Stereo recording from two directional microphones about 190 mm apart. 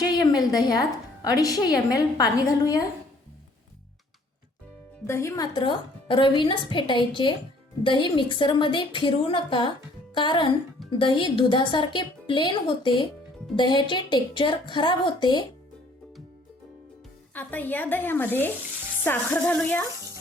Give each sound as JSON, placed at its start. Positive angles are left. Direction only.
{"t": 0.0, "sound": "a woman's voice", "side_deg": 20}
{"t": 5.0, "sound": "a woman's voice", "side_deg": 15}
{"t": 17.3, "sound": "a woman's voice", "side_deg": 10}